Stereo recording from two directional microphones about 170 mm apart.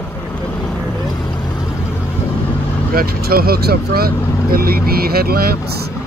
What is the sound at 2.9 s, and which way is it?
Speech, 60° right (ahead or behind).